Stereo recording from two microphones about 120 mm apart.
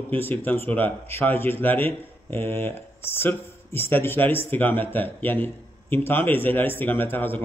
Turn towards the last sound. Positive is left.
turn(degrees=15)  # may be behind; listen again after turning